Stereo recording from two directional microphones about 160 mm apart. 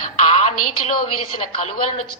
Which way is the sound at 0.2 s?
45° left (ahead or behind).